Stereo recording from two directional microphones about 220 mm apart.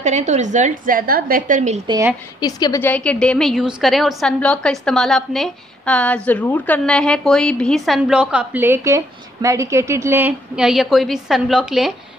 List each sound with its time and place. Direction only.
0.0 s a woman's voice: 30° right (ahead or behind)
2.4 s a woman's voice: 15° left (ahead or behind); by 11.9 s centre (ahead or behind)